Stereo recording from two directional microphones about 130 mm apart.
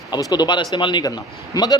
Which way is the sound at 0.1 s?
30° left (ahead or behind).